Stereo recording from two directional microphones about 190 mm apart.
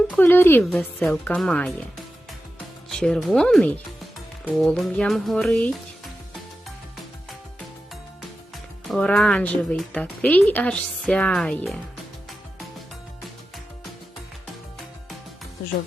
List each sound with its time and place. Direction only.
0.2 s speech: 10° left (ahead or behind)
2.9 s a woman's voice: centre (ahead or behind)
8.9 s a woman's voice: 5° left (ahead or behind)